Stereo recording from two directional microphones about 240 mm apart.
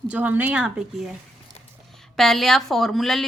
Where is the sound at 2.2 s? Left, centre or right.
Centre.